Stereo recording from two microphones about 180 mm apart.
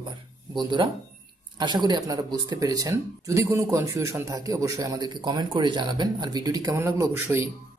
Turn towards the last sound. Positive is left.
turn(degrees=-15)  # may be behind; listen again after turning